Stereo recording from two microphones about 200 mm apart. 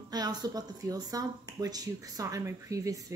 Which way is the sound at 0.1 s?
20° right (ahead or behind).